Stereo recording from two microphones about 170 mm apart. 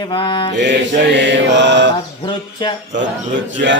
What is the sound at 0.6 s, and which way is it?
Mantra, 90° right.